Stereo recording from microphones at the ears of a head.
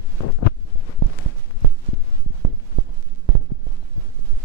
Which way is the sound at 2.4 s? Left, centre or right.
Right.